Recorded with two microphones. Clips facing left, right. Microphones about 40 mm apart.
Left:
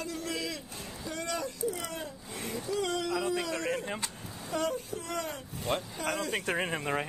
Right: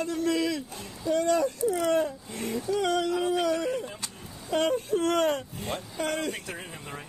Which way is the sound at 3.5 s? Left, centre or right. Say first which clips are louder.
Right 5 dB; left.